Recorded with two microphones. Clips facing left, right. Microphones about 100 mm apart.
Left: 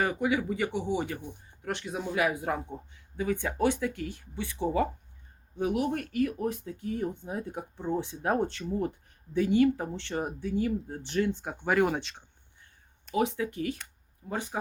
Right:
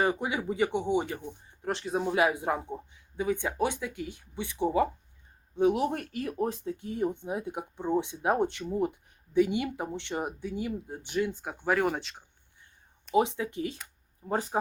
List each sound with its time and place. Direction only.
0.0 s speech: 25° right (ahead or behind)
11.3 s speech: centre (ahead or behind)
13.1 s speech: 25° right (ahead or behind)
14.3 s speech: 35° right (ahead or behind)